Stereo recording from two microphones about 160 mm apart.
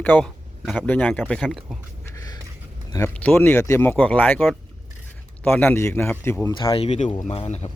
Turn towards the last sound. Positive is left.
turn(degrees=40)  # may be behind; listen again after turning